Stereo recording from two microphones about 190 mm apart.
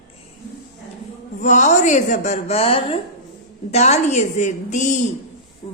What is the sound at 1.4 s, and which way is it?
A woman's voice, 40° left (ahead or behind).